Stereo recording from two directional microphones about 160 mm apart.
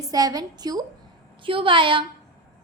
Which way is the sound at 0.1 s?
25° right (ahead or behind).